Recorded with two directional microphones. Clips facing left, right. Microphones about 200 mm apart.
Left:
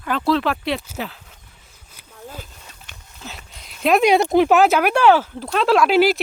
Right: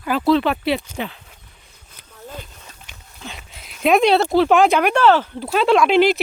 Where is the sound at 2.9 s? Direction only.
Centre (ahead or behind).